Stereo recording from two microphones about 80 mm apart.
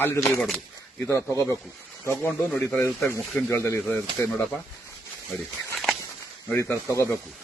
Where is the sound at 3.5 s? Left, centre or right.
Left.